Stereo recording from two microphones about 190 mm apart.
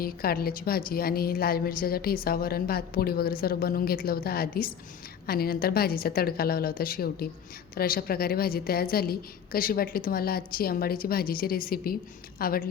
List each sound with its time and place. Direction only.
0.0 s a woman's voice: 50° left (ahead or behind)